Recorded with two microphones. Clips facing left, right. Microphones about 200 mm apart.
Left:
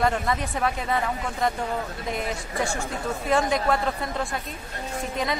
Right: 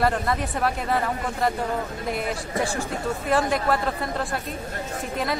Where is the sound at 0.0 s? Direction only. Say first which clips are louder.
Right 1 dB; centre (ahead or behind).